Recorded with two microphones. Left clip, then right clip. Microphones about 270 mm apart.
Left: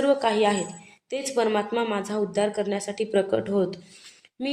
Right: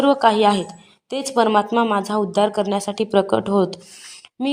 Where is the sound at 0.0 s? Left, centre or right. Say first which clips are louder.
Right 6 dB; right.